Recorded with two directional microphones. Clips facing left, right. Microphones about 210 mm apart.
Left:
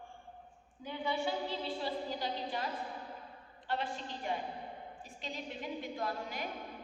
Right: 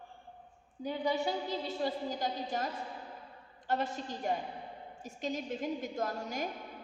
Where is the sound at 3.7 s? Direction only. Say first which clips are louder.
Right 4 dB; 45° right (ahead or behind).